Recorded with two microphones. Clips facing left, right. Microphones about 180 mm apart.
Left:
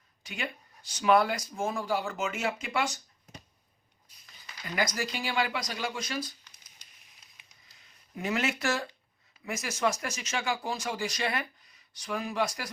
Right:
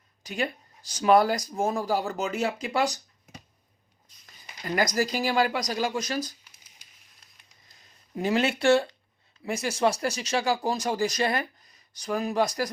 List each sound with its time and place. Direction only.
0.2 s speech: 40° right (ahead or behind)
4.6 s speech: 45° right (ahead or behind)
8.1 s speech: 30° right (ahead or behind)